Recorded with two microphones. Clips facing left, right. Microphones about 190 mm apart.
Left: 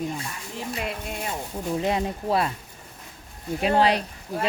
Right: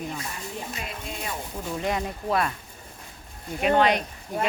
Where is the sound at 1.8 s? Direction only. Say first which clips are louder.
Left 2 dB; 25° left (ahead or behind).